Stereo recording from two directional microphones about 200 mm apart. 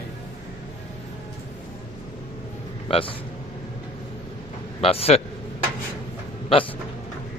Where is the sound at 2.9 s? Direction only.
25° left (ahead or behind).